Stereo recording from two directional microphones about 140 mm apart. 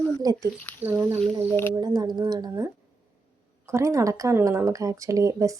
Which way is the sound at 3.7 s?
20° right (ahead or behind).